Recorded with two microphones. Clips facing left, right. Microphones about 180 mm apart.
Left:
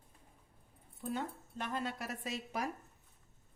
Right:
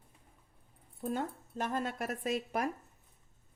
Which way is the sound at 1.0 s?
50° right (ahead or behind).